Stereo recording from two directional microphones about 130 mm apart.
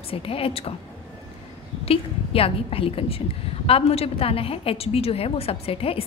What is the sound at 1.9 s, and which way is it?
A woman's voice, 45° left (ahead or behind).